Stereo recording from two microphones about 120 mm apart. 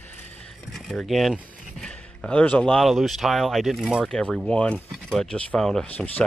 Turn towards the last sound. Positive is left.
turn(degrees=15)  # may be behind; listen again after turning